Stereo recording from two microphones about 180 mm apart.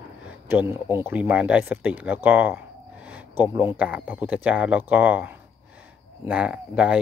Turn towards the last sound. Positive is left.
turn(degrees=-5)  # may be behind; listen again after turning